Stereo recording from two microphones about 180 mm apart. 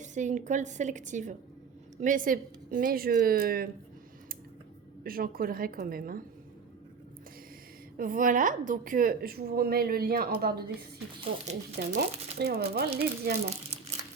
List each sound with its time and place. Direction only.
0.0 s a woman's voice: 40° right (ahead or behind)
5.0 s a woman's voice: 55° right (ahead or behind)
7.9 s a woman's voice: 50° right (ahead or behind)
11.2 s speech: 40° right (ahead or behind)
11.9 s a woman's voice: 65° right (ahead or behind)
13.4 s crumpling: 35° right (ahead or behind)